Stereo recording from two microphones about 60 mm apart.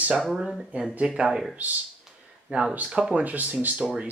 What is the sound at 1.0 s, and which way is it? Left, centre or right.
Speech, centre.